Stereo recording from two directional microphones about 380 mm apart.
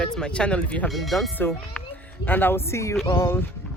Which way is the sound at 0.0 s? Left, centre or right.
Centre.